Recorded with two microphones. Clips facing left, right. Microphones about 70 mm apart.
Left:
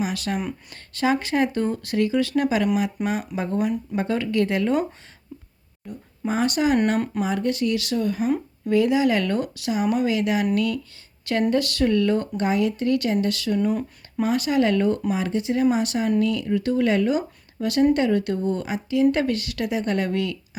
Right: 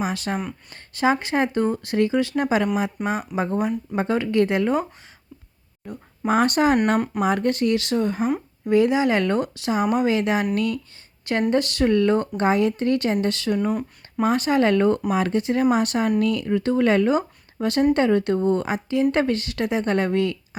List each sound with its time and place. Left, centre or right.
0.0 s a woman's voice: right
5.8 s a woman's voice: right
11.5 s a woman's voice: right
15.1 s a woman's voice: right